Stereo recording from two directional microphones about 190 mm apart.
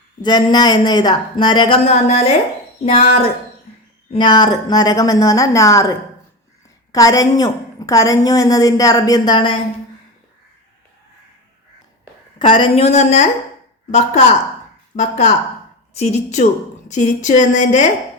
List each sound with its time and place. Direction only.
0.2 s a woman's voice: 20° left (ahead or behind)
6.9 s a woman's voice: 20° left (ahead or behind)
12.4 s a woman's voice: 25° left (ahead or behind)